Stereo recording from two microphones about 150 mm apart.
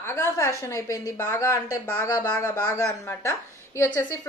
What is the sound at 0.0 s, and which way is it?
A woman's voice, 20° left (ahead or behind).